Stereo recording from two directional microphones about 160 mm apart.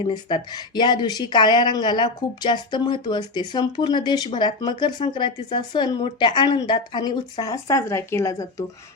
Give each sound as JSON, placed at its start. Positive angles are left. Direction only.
{"t": 0.1, "sound": "a woman's voice", "side_deg": 30}